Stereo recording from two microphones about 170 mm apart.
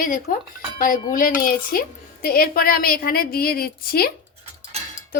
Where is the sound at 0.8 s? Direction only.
55° left (ahead or behind).